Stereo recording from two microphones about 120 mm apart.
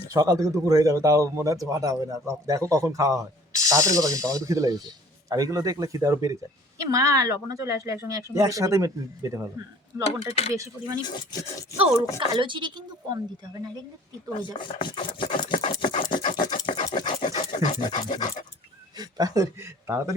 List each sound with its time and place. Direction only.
0.1 s speech: 30° right (ahead or behind)
10.0 s speech: 65° left (ahead or behind)
10.5 s speech: 25° right (ahead or behind)
11.0 s dog: 35° left (ahead or behind)
12.3 s speech: 40° right (ahead or behind)
14.6 s speech: 45° left (ahead or behind)
17.2 s dog: 45° left (ahead or behind)
18.9 s speech: 35° right (ahead or behind)